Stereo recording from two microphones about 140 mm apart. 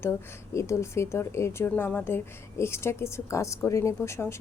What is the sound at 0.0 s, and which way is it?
A woman's voice, 20° left (ahead or behind).